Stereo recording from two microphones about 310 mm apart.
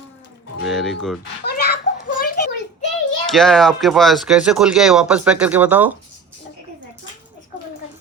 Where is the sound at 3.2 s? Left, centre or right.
Centre.